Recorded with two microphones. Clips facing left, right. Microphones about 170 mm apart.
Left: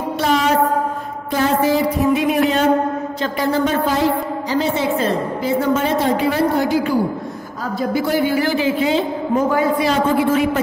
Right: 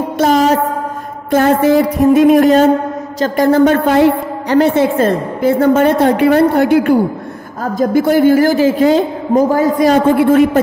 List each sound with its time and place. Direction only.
0.2 s music: 45° right (ahead or behind)
1.3 s a woman's voice: 50° right (ahead or behind)
7.6 s a woman's voice: 50° right (ahead or behind)